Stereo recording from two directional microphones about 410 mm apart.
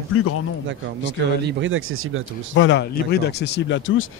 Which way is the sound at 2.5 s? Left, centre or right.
Left.